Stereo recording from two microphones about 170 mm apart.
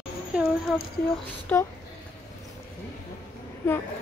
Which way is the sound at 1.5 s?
10° left (ahead or behind).